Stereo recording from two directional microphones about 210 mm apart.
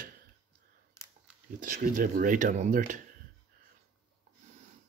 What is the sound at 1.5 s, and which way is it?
Speech, 40° right (ahead or behind).